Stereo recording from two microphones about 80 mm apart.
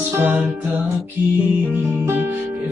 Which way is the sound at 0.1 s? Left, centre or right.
Right.